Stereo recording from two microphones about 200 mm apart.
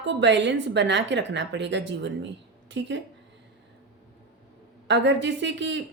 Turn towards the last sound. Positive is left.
turn(degrees=-65)  # may be behind; listen again after turning